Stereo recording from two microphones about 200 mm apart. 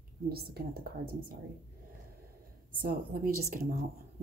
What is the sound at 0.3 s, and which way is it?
Speech, 50° right (ahead or behind).